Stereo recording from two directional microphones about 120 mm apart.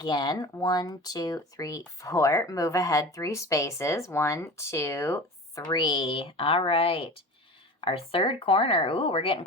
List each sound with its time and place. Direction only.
0.0 s speech: 35° left (ahead or behind)
5.6 s speech: 40° left (ahead or behind)